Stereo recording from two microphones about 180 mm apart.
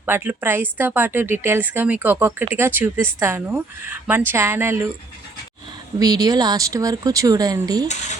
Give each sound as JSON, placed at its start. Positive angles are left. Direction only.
{"t": 0.0, "sound": "speech", "side_deg": -10}
{"t": 6.0, "sound": "speech", "side_deg": -20}